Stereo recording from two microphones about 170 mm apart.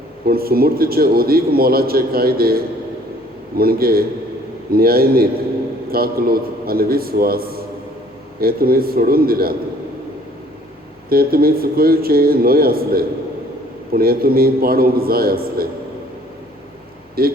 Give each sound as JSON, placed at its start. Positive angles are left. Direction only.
{"t": 0.3, "sound": "a man's voice", "side_deg": -60}
{"t": 11.1, "sound": "a man's voice", "side_deg": -60}
{"t": 17.2, "sound": "a man's voice", "side_deg": -60}